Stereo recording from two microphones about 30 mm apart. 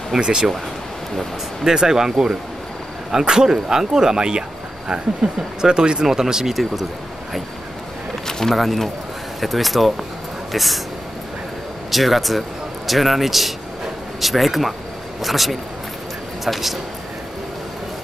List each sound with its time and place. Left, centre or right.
0.2 s speech: right
1.8 s speech: centre
6.0 s speech: centre
8.3 s a sound: centre
8.5 s speech: centre
11.9 s a man's voice: centre